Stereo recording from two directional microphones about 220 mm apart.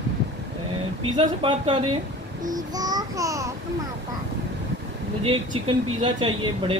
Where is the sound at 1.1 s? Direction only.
20° right (ahead or behind).